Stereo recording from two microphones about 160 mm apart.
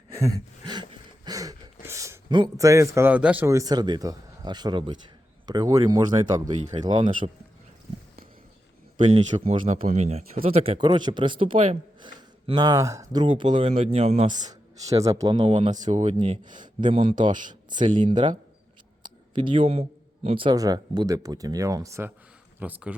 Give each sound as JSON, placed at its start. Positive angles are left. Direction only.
{"t": 0.1, "sound": "a sound", "side_deg": -20}
{"t": 2.3, "sound": "speech", "side_deg": -25}
{"t": 7.2, "sound": "speech", "side_deg": -35}
{"t": 9.0, "sound": "speech", "side_deg": -40}
{"t": 13.2, "sound": "speech", "side_deg": -30}
{"t": 14.8, "sound": "speech", "side_deg": -20}
{"t": 15.9, "sound": "speech", "side_deg": -45}
{"t": 16.1, "sound": "speech", "side_deg": -30}